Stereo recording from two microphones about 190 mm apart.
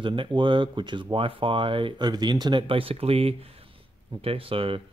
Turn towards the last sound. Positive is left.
turn(degrees=-30)  # may be behind; listen again after turning